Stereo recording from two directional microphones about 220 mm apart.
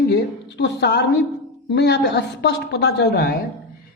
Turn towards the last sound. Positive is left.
turn(degrees=45)  # may be behind; listen again after turning